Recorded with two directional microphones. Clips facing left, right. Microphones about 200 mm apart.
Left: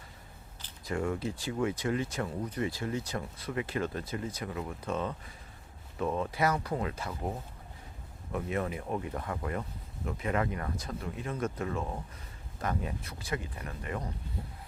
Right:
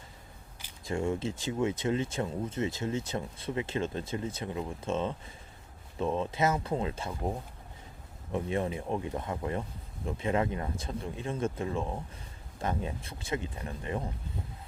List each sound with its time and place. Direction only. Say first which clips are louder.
0.9 s speech: right 1 dB; 25° right (ahead or behind)
7.1 s speech: right 2 dB; 15° right (ahead or behind)
8.3 s speech: right 2 dB; 25° right (ahead or behind)